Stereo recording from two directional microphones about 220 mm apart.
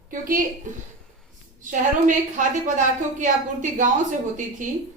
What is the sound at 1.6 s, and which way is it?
A woman's voice, 35° right (ahead or behind).